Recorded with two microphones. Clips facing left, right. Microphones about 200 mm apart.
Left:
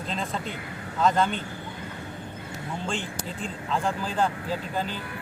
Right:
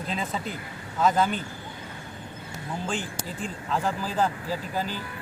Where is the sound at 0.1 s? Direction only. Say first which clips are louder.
Even; 5° right (ahead or behind).